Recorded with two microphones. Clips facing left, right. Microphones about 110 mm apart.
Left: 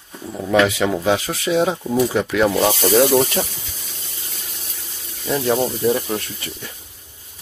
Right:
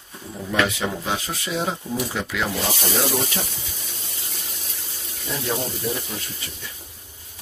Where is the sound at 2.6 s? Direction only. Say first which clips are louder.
Left 10 dB; 70° left (ahead or behind).